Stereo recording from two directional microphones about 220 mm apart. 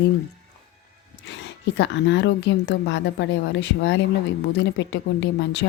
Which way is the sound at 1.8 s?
55° left (ahead or behind).